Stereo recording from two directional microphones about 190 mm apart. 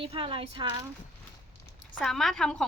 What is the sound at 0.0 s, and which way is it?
Speech, 30° right (ahead or behind).